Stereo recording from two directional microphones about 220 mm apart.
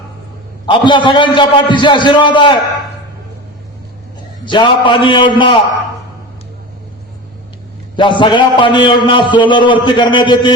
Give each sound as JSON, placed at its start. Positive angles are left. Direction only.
{"t": 0.7, "sound": "a man's voice", "side_deg": 20}
{"t": 4.4, "sound": "a man's voice", "side_deg": 20}
{"t": 7.9, "sound": "a man's voice", "side_deg": 20}